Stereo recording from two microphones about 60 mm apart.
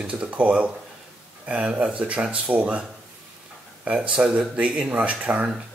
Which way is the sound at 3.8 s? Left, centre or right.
Centre.